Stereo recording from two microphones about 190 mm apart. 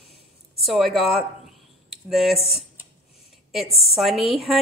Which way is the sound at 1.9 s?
Centre (ahead or behind).